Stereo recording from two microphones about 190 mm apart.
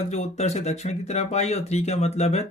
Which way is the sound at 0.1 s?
35° left (ahead or behind).